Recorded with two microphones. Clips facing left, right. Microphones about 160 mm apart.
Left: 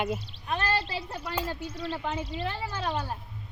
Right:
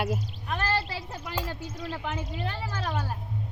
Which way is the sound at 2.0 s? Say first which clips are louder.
Left 1 dB; 15° left (ahead or behind).